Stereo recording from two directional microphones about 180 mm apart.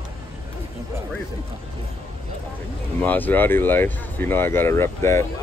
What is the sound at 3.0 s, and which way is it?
Speech, 10° left (ahead or behind).